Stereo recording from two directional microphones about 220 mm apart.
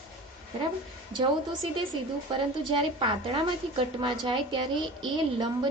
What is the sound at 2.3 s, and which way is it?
A woman's voice, 20° right (ahead or behind).